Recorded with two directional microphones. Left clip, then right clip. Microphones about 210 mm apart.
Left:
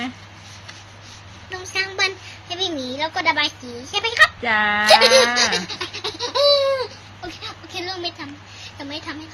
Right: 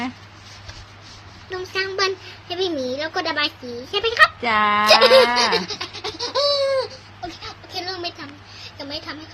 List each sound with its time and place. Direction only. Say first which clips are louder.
1.7 s a sound: left 1 dB; 30° right (ahead or behind)
2.9 s a woman's voice: left 3 dB; 35° right (ahead or behind)
4.4 s speech: even; 20° right (ahead or behind)
5.9 s laughter: left 1 dB; 10° right (ahead or behind)
7.2 s speech: even; 10° right (ahead or behind)
7.7 s a sound: even; 35° right (ahead or behind)
8.8 s speech: even; 25° right (ahead or behind)